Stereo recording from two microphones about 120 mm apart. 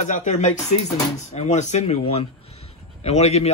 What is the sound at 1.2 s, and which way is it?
A man's voice, 70° left (ahead or behind).